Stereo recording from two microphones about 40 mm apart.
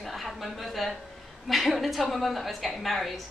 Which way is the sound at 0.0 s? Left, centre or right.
Centre.